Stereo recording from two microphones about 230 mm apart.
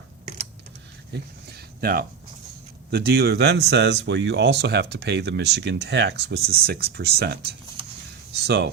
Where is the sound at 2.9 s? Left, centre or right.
Right.